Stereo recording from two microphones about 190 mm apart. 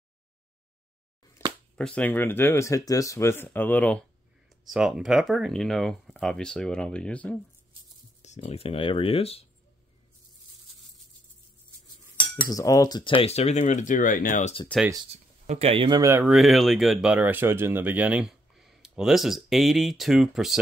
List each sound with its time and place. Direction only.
1.4 s a sound: 15° left (ahead or behind)
1.8 s speech: 5° left (ahead or behind)
8.2 s speech: 35° left (ahead or behind)
12.4 s speech: 20° left (ahead or behind); by 14.5 s 45° left (ahead or behind)
15.0 s speech: 35° right (ahead or behind); by 16.3 s 15° right (ahead or behind)
16.3 s speech: centre (ahead or behind)